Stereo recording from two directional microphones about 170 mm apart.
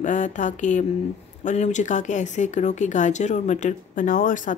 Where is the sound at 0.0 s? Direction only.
45° left (ahead or behind).